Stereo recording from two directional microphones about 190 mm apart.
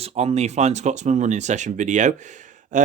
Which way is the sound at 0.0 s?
35° right (ahead or behind).